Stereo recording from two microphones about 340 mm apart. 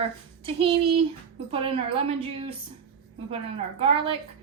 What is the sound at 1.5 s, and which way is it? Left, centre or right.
Speech, centre.